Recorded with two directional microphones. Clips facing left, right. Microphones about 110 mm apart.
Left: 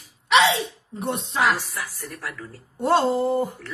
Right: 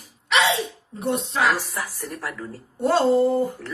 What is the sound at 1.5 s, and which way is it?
Speech, 45° right (ahead or behind).